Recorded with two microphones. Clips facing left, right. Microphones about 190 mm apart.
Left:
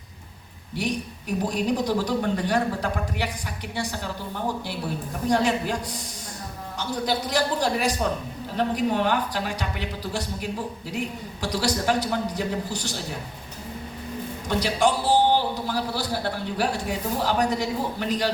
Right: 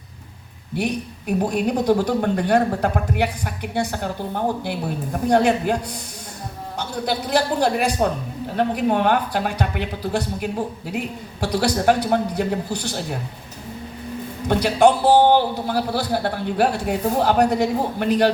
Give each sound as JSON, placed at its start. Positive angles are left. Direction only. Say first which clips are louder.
{"t": 1.5, "sound": "a man's voice", "louder": "right 5 dB", "side_deg": -55}
{"t": 14.4, "sound": "a man's voice", "louder": "right 7 dB", "side_deg": -55}